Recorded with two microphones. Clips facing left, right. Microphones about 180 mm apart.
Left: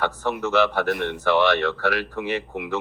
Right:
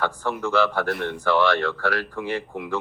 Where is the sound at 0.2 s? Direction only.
20° left (ahead or behind).